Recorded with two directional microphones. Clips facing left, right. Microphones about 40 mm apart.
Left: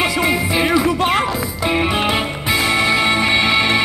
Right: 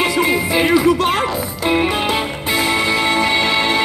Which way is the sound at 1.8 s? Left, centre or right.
Centre.